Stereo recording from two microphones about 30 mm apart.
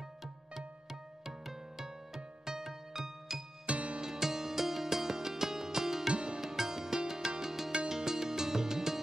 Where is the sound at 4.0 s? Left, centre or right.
Centre.